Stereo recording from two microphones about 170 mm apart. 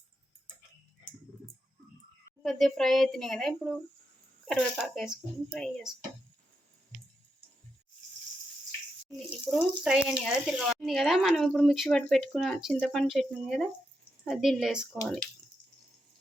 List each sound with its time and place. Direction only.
2.4 s speech: centre (ahead or behind)
9.1 s speech: centre (ahead or behind)